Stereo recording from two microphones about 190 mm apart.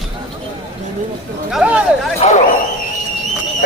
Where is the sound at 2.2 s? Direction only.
35° left (ahead or behind).